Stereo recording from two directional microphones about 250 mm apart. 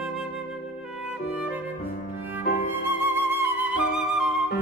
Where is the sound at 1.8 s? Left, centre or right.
Left.